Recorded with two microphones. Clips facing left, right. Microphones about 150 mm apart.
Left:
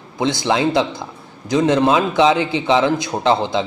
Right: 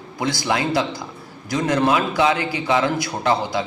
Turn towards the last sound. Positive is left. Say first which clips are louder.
# left 4 dB
turn(degrees=25)  # may be behind; listen again after turning